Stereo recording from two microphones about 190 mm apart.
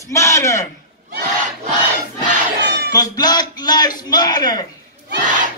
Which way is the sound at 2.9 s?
20° left (ahead or behind).